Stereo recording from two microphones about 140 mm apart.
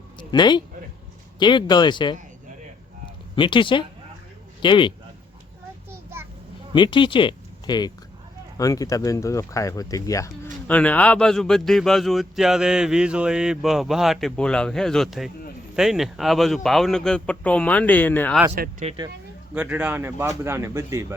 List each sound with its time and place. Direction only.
0.2 s speech: 30° left (ahead or behind)
3.3 s speech: 35° left (ahead or behind)
5.9 s a sound: 15° right (ahead or behind)
6.7 s speech: 35° left (ahead or behind)
10.7 s a man's voice: 10° left (ahead or behind)
18.5 s speech: 65° right (ahead or behind)
19.5 s speech: 10° right (ahead or behind)